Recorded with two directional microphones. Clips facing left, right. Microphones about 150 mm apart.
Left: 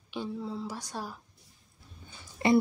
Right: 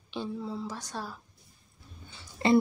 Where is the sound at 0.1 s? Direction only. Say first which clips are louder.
Even; 15° left (ahead or behind).